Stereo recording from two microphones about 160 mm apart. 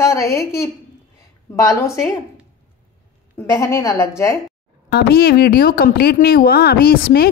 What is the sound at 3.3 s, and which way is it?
A woman's voice, 15° left (ahead or behind).